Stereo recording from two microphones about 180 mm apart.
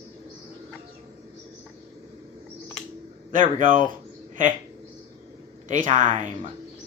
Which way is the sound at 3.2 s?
45° right (ahead or behind).